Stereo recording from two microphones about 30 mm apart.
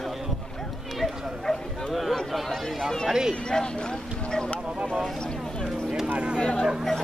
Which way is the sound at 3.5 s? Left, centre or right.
Left.